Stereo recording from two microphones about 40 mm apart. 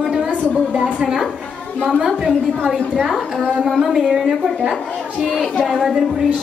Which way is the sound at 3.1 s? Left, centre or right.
Centre.